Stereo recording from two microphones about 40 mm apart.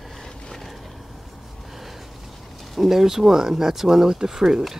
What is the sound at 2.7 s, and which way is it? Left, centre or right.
Speech, centre.